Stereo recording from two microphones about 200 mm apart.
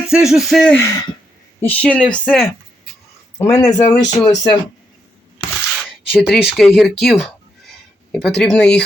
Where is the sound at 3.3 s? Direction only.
15° left (ahead or behind).